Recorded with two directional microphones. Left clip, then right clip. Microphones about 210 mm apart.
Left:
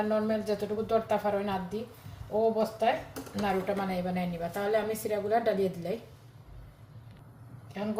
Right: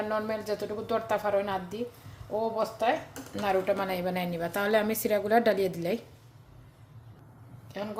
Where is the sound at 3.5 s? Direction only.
50° right (ahead or behind).